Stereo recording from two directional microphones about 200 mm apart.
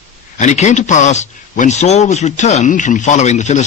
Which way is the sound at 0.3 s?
35° left (ahead or behind).